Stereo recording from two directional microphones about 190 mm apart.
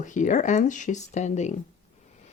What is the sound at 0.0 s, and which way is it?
Speech, 40° left (ahead or behind).